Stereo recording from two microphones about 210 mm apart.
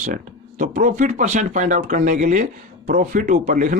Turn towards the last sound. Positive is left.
turn(degrees=-40)  # may be behind; listen again after turning